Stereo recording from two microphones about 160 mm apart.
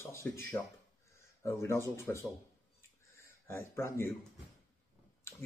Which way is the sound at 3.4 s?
15° left (ahead or behind).